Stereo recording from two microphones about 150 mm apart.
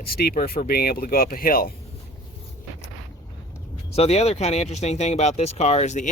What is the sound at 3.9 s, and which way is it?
Speech, 45° left (ahead or behind).